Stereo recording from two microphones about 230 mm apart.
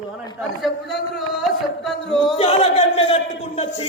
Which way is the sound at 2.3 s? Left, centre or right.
Left.